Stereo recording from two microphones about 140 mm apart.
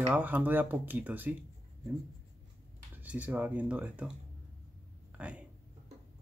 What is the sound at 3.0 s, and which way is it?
Speech, 10° right (ahead or behind).